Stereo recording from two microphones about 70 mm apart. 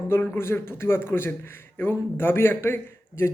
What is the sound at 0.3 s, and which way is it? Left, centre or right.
Speech, left.